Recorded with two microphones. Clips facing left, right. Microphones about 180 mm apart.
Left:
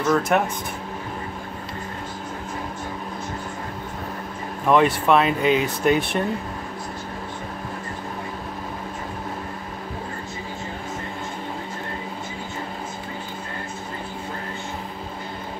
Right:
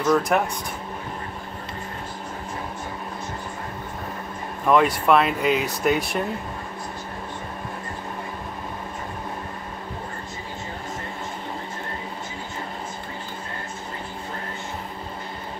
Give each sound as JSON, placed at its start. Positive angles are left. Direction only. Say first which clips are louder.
{"t": 0.0, "sound": "speech", "louder": "even", "side_deg": 0}
{"t": 4.6, "sound": "speech", "louder": "left 1 dB", "side_deg": 0}